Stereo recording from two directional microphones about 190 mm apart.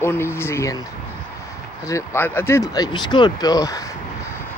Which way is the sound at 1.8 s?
15° left (ahead or behind).